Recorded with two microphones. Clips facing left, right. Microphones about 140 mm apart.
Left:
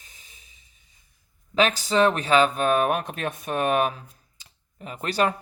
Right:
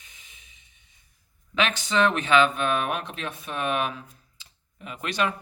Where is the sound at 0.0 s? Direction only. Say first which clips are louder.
Left 1 dB; 35° left (ahead or behind).